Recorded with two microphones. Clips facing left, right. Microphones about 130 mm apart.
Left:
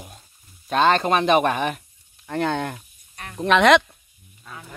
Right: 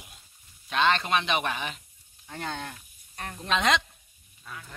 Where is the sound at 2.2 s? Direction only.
70° left (ahead or behind).